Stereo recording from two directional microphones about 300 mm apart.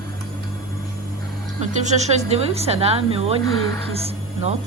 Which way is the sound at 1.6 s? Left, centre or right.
Right.